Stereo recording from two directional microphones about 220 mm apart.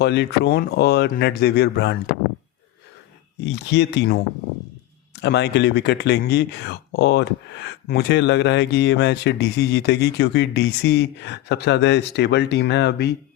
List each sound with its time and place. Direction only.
0.0 s speech: 50° left (ahead or behind)
3.4 s speech: 55° left (ahead or behind)
5.2 s speech: 50° left (ahead or behind)